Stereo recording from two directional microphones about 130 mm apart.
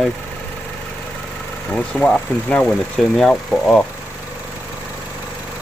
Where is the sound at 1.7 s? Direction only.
10° left (ahead or behind).